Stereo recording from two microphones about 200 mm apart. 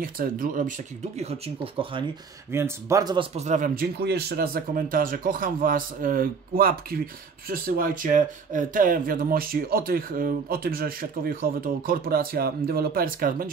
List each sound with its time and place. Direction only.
0.0 s speech: 45° right (ahead or behind); by 2.0 s 25° right (ahead or behind)
2.5 s speech: 15° right (ahead or behind)
3.3 s speech: 35° right (ahead or behind)